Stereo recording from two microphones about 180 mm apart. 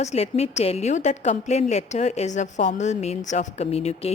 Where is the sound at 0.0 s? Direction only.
35° left (ahead or behind).